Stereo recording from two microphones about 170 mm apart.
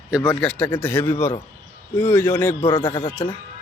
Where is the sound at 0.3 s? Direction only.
5° left (ahead or behind).